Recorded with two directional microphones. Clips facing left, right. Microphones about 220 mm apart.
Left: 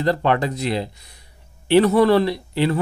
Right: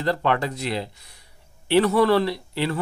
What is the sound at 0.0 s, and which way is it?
Speech, 20° left (ahead or behind).